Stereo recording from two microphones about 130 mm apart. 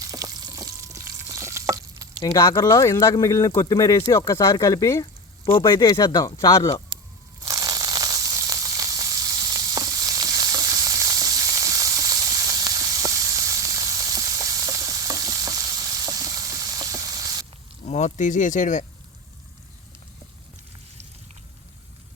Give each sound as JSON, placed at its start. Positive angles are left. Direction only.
{"t": 0.0, "sound": "frying", "side_deg": -25}
{"t": 2.2, "sound": "speech", "side_deg": 35}
{"t": 2.7, "sound": "speech", "side_deg": 20}
{"t": 5.5, "sound": "speech", "side_deg": 40}
{"t": 6.1, "sound": "speech", "side_deg": 25}
{"t": 7.4, "sound": "sizzle", "side_deg": -30}
{"t": 17.8, "sound": "speech", "side_deg": 65}